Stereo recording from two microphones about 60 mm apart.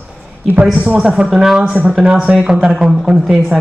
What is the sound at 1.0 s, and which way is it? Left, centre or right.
Speech, centre.